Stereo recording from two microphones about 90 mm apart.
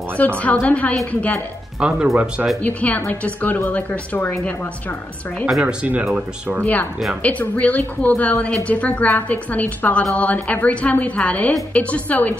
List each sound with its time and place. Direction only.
0.4 s a woman's voice: 15° left (ahead or behind)
1.8 s speech: 10° right (ahead or behind)
2.6 s a woman's voice: 20° left (ahead or behind)
5.6 s speech: 10° right (ahead or behind)
6.6 s a woman's voice: 20° left (ahead or behind)